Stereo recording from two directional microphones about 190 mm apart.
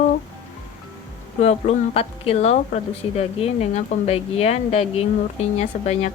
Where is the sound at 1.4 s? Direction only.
35° left (ahead or behind).